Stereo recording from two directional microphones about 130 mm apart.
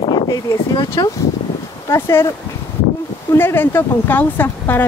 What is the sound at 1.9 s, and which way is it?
Speech, 20° left (ahead or behind).